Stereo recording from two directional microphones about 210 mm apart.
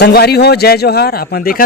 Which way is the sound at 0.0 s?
50° left (ahead or behind).